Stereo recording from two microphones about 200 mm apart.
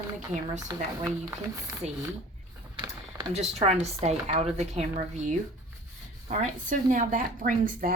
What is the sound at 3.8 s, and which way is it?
Speech, 35° right (ahead or behind).